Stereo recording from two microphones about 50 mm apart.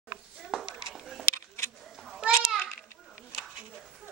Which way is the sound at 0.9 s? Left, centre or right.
Centre.